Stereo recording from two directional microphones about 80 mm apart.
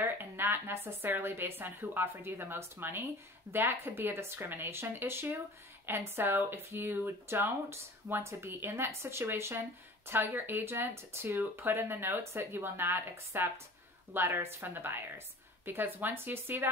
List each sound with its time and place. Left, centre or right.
0.0 s speech: right